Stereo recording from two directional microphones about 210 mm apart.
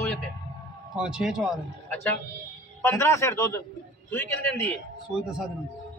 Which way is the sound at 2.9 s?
15° left (ahead or behind).